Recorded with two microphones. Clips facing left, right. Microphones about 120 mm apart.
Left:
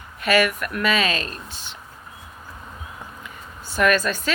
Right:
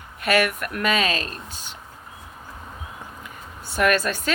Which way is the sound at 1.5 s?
45° right (ahead or behind).